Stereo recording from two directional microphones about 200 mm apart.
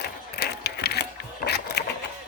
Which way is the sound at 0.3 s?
55° left (ahead or behind).